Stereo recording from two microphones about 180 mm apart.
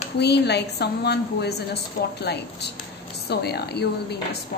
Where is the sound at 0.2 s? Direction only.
65° left (ahead or behind).